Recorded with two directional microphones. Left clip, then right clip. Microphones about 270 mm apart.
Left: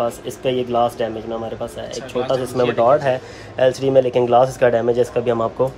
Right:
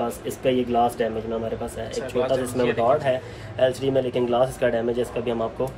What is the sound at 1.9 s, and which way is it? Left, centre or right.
Speech, centre.